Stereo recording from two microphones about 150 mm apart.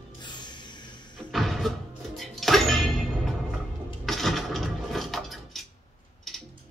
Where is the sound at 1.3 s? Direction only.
Centre (ahead or behind).